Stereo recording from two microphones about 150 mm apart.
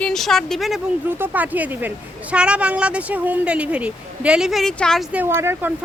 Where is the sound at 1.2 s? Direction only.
10° right (ahead or behind).